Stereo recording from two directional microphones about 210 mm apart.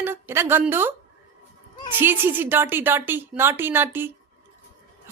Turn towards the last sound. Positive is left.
turn(degrees=-10)  # may be behind; listen again after turning